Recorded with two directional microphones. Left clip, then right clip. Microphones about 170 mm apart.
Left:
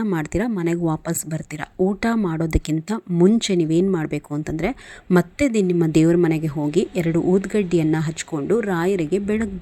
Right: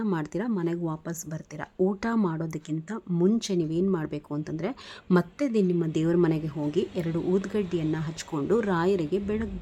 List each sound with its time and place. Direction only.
0.0 s speech: 20° left (ahead or behind)
1.8 s speech: 15° left (ahead or behind)
2.6 s a woman's voice: 35° left (ahead or behind)
6.2 s speech: 20° left (ahead or behind)
8.3 s speech: 15° left (ahead or behind)